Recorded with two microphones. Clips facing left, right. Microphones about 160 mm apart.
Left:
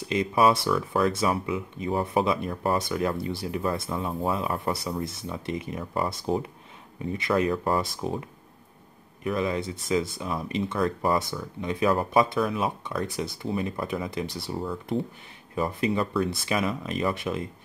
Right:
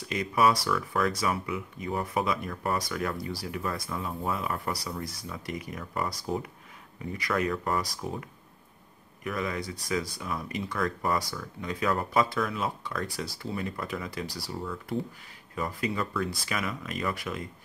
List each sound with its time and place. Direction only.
0.0 s speech: 25° left (ahead or behind)